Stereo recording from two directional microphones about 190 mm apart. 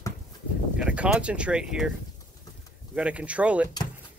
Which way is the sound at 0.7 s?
5° right (ahead or behind).